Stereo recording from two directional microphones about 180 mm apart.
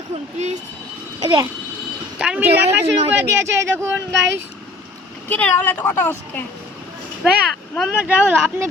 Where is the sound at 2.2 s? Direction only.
5° right (ahead or behind).